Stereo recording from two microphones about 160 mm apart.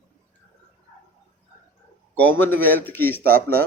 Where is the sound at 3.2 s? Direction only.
65° right (ahead or behind).